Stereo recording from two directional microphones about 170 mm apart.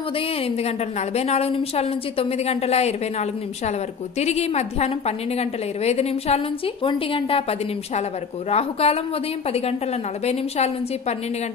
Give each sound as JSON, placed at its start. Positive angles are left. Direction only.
{"t": 0.4, "sound": "a woman's voice", "side_deg": 40}
{"t": 10.2, "sound": "a woman's voice", "side_deg": 40}